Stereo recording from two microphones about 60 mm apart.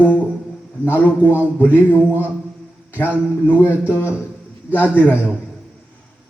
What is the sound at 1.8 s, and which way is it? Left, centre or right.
Speech, right.